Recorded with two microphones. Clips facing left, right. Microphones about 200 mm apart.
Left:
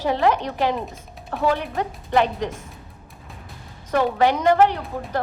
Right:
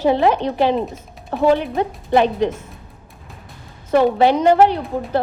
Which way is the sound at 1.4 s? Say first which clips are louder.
Right 6 dB; 20° right (ahead or behind).